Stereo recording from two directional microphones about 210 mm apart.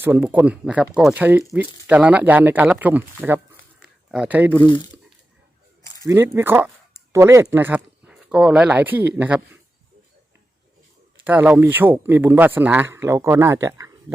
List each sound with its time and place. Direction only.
0.0 s speech: 10° right (ahead or behind)
4.6 s speech: 20° left (ahead or behind)
6.1 s speech: 10° right (ahead or behind)
11.2 s speech: 5° right (ahead or behind)